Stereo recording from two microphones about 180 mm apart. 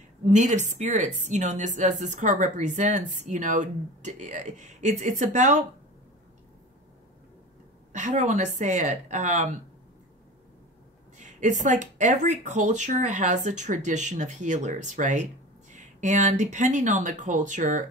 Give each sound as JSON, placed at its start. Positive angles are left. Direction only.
{"t": 0.2, "sound": "a woman's voice", "side_deg": -40}
{"t": 7.9, "sound": "a woman's voice", "side_deg": -45}
{"t": 11.1, "sound": "a woman's voice", "side_deg": -45}